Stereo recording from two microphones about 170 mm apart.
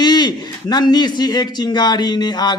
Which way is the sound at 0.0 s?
25° left (ahead or behind).